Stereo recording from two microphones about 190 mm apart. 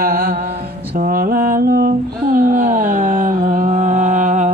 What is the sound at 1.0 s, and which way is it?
Mantra, 45° right (ahead or behind).